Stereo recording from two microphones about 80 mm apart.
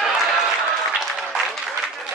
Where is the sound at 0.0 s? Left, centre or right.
Centre.